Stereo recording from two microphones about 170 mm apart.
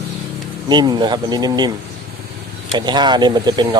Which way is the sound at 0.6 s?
25° right (ahead or behind).